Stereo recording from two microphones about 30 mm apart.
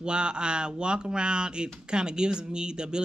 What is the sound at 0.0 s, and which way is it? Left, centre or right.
Speech, right.